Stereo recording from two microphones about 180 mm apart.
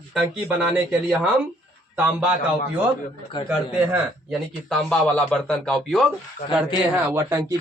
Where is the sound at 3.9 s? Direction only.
Centre (ahead or behind).